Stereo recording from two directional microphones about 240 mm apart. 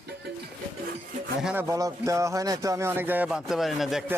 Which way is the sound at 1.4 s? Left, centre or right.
Centre.